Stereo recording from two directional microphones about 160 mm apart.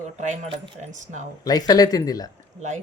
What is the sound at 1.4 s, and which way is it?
Speech, 25° left (ahead or behind).